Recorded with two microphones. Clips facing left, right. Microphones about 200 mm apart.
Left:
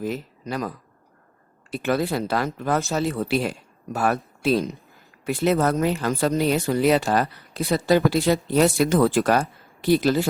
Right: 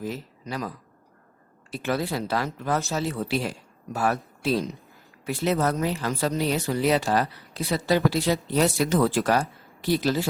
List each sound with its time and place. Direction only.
0.4 s speech: 50° left (ahead or behind)
1.8 s a man's voice: 55° left (ahead or behind)